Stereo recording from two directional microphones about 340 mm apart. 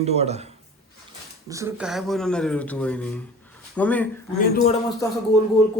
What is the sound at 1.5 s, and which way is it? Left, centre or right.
A man's voice, centre.